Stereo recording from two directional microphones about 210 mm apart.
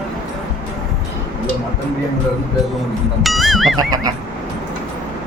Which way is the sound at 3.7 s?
20° right (ahead or behind).